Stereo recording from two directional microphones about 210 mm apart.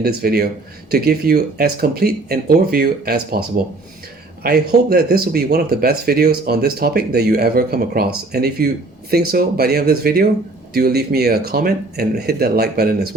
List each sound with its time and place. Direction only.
0.0 s speech: 45° right (ahead or behind)